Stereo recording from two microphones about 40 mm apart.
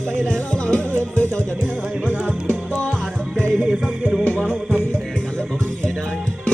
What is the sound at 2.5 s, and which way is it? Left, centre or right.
Music, left.